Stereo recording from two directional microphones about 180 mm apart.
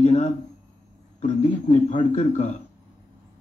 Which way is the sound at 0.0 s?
40° left (ahead or behind).